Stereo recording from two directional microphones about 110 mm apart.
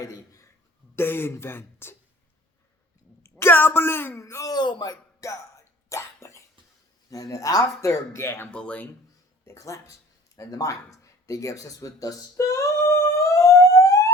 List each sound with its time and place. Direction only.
0.0 s speech: 30° left (ahead or behind)
3.2 s speech: 20° left (ahead or behind)
5.9 s cough: 25° left (ahead or behind)
7.1 s speech: 30° left (ahead or behind)
8.4 s speech: 10° left (ahead or behind)
9.5 s speech: 30° left (ahead or behind)
10.3 s a sound: 30° left (ahead or behind)